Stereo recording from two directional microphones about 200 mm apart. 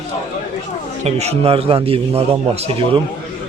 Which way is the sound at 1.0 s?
35° right (ahead or behind).